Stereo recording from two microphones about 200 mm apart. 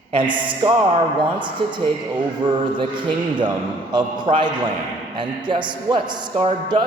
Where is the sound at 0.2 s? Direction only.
25° right (ahead or behind).